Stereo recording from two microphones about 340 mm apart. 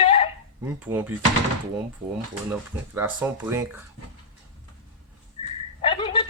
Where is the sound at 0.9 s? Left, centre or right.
Centre.